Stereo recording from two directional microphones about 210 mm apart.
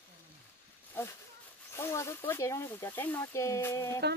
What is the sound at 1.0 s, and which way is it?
Speech, 10° left (ahead or behind).